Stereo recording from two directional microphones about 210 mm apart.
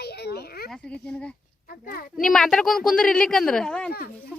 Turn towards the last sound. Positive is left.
turn(degrees=5)  # may be behind; listen again after turning